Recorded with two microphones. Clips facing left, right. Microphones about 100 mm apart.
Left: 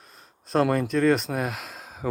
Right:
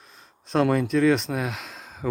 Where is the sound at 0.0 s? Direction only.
Centre (ahead or behind).